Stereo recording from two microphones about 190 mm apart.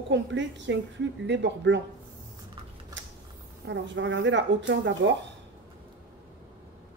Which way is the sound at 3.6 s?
70° right (ahead or behind).